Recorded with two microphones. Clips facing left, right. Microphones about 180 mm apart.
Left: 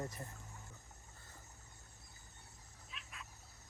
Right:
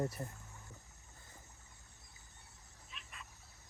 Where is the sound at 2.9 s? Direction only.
Centre (ahead or behind).